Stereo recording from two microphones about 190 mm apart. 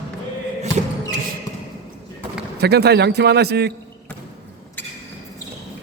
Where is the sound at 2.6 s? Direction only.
60° right (ahead or behind).